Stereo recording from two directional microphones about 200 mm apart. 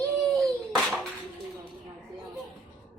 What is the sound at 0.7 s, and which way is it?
Bathtub, centre (ahead or behind).